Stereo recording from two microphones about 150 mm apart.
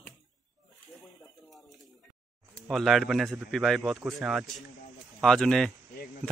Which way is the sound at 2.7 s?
Centre (ahead or behind).